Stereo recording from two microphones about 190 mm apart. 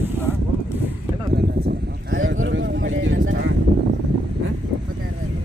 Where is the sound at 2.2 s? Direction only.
90° right.